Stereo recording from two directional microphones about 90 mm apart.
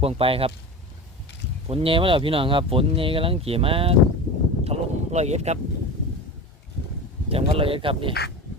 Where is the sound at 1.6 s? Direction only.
85° right.